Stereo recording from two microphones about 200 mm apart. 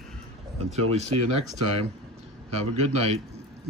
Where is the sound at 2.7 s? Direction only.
30° right (ahead or behind).